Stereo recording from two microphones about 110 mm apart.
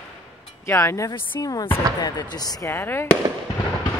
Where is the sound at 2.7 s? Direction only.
20° left (ahead or behind).